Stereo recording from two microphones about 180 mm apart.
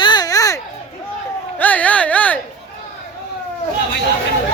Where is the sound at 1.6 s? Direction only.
10° left (ahead or behind).